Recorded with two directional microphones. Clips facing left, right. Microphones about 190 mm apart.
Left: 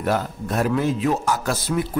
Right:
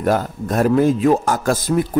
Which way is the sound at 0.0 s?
45° right (ahead or behind).